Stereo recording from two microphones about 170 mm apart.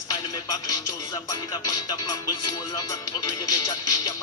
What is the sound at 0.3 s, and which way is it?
Music, 25° left (ahead or behind).